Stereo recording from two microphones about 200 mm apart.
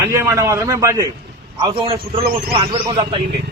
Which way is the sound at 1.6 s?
25° right (ahead or behind).